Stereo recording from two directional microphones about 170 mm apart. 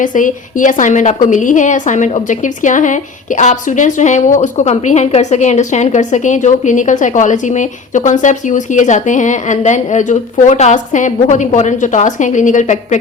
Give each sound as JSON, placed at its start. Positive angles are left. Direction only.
{"t": 0.0, "sound": "a woman's voice", "side_deg": 50}